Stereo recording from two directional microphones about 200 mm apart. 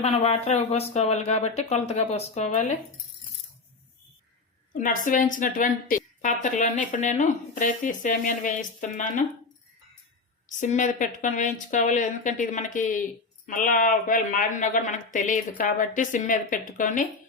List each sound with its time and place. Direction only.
0.0 s speech: 30° left (ahead or behind)
4.7 s speech: 40° left (ahead or behind)
10.6 s speech: 40° left (ahead or behind)